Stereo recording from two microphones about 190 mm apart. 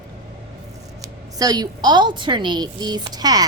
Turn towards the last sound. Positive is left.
turn(degrees=-20)  # may be behind; listen again after turning